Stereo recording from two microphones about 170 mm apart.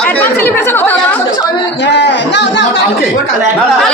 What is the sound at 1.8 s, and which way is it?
Speech, 90° left.